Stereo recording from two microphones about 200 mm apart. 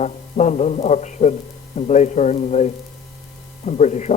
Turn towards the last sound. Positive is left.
turn(degrees=35)  # may be behind; listen again after turning